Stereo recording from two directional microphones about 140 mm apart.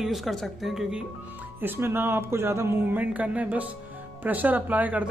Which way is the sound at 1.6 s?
15° right (ahead or behind).